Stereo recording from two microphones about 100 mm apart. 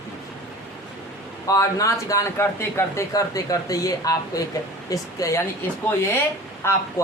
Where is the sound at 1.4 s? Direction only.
35° left (ahead or behind).